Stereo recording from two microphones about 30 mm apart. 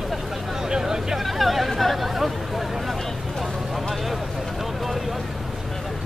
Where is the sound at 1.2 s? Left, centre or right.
Centre.